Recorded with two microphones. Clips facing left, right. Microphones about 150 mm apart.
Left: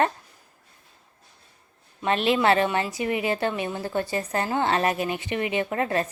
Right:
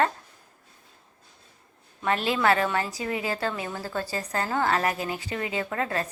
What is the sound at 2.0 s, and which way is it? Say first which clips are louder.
A woman's voice: left 3 dB; 25° left (ahead or behind).